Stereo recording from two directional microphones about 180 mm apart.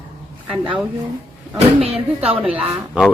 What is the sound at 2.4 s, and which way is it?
Speech, 5° right (ahead or behind).